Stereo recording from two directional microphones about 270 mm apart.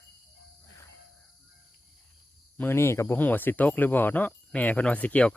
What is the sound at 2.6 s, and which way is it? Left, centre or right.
Speech, centre.